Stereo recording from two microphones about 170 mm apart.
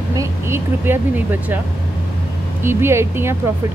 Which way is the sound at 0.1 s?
15° right (ahead or behind).